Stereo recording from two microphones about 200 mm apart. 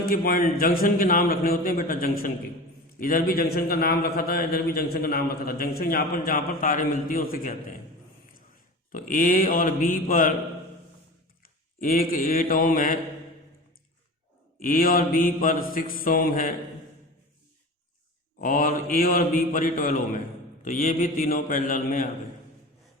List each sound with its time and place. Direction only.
0.1 s a man's voice: 45° left (ahead or behind)
8.9 s a man's voice: 40° left (ahead or behind)
11.8 s a man's voice: 45° left (ahead or behind)
14.6 s a man's voice: 45° left (ahead or behind)
18.3 s a man's voice: 45° left (ahead or behind)